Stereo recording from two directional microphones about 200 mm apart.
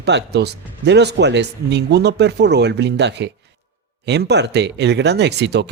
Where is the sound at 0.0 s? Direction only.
60° right (ahead or behind).